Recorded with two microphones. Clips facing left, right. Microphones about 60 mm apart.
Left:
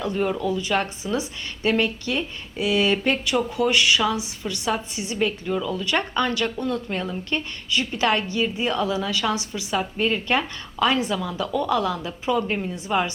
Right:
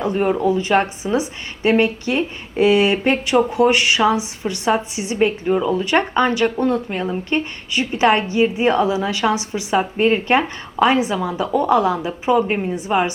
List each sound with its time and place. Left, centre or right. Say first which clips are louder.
0.0 s speech: right 6 dB; right
6.7 s speech: right 5 dB; centre